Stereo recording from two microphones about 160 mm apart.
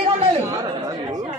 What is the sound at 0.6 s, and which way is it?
Chatter, 25° right (ahead or behind).